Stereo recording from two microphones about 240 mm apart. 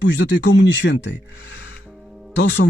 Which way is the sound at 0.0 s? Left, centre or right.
Left.